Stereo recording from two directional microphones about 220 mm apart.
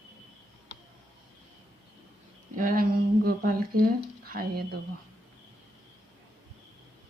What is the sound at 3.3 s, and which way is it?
Humming, 40° right (ahead or behind).